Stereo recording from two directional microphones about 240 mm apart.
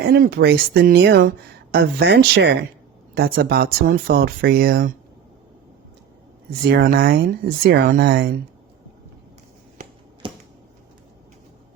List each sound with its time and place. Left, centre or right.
0.0 s speech: right
6.5 s speech: right
10.2 s a sound: centre